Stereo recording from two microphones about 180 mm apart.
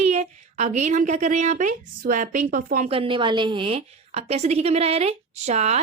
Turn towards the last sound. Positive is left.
turn(degrees=-35)  # may be behind; listen again after turning